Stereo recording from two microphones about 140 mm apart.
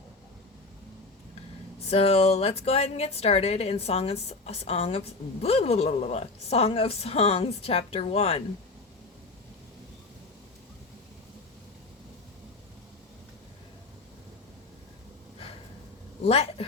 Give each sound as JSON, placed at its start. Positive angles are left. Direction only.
{"t": 1.9, "sound": "a woman's voice", "side_deg": 45}
{"t": 16.2, "sound": "a woman's voice", "side_deg": 45}